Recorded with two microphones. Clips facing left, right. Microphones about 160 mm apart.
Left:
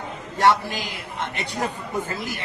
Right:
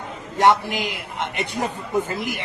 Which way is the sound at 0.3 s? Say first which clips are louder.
Right 2 dB; 20° right (ahead or behind).